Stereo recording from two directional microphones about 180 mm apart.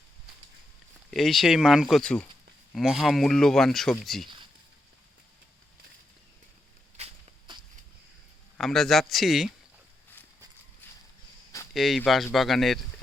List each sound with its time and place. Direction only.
1.1 s speech: centre (ahead or behind)
6.9 s walk: 35° right (ahead or behind)
8.5 s speech: centre (ahead or behind)
11.7 s speech: centre (ahead or behind)